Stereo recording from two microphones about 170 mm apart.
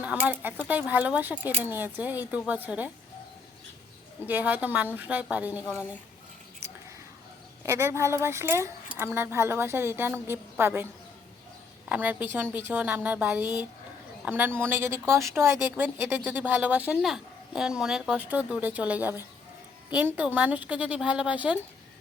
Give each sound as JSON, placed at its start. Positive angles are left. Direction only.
{"t": 0.0, "sound": "speech", "side_deg": -10}
{"t": 4.3, "sound": "speech", "side_deg": -10}
{"t": 7.6, "sound": "speech", "side_deg": -15}
{"t": 11.9, "sound": "speech", "side_deg": -10}